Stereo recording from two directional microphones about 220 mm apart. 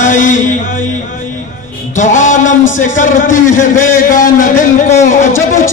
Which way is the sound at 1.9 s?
35° left (ahead or behind).